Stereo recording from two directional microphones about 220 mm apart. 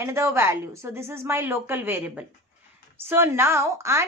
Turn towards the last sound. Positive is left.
turn(degrees=-15)  # may be behind; listen again after turning